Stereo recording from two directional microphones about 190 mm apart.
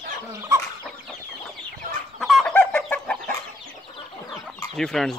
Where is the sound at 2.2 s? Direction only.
Centre (ahead or behind).